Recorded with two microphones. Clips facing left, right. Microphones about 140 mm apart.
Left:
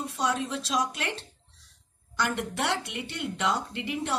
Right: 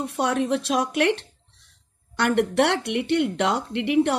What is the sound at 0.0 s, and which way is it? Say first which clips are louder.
Speech: right 6 dB; 60° right (ahead or behind).